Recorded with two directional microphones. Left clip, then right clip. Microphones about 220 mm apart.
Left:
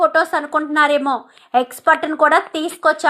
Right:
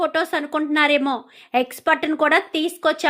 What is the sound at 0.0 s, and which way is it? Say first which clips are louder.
A woman's voice: left 6 dB; 55° right (ahead or behind).